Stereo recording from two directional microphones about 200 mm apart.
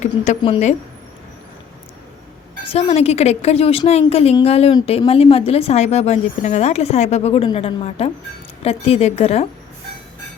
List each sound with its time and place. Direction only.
0.0 s a woman's voice: 30° left (ahead or behind)
2.7 s a woman's voice: 30° left (ahead or behind)